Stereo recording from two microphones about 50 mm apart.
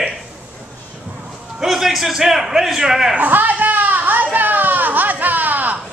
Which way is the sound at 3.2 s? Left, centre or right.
Right.